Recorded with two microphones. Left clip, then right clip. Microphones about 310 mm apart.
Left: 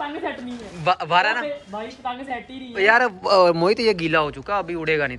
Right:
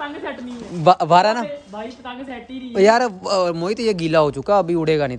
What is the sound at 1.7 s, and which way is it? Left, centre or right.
Speech, centre.